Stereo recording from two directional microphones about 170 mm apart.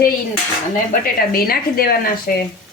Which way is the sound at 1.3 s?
60° left (ahead or behind).